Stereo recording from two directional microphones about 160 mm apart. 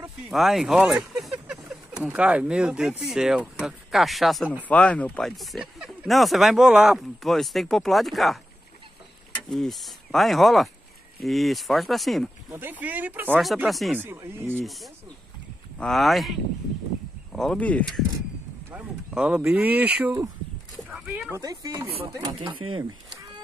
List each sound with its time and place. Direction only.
0.3 s speech: centre (ahead or behind)
9.5 s speech: centre (ahead or behind)
12.4 s speech: 10° right (ahead or behind)
13.7 s speech: centre (ahead or behind)
14.0 s speech: 15° right (ahead or behind)
14.6 s speech: centre (ahead or behind)
18.7 s speech: 10° right (ahead or behind)
20.9 s a sound: centre (ahead or behind)
21.3 s speech: 20° right (ahead or behind)